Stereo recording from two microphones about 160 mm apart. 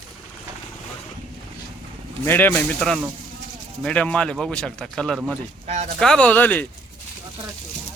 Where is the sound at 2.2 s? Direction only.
15° left (ahead or behind).